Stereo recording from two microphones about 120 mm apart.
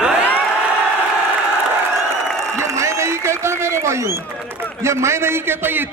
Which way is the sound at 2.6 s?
25° right (ahead or behind).